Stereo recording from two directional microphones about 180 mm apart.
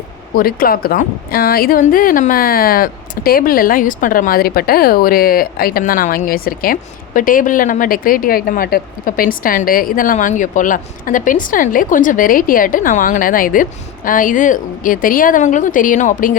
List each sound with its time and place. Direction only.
0.3 s a woman's voice: 55° left (ahead or behind)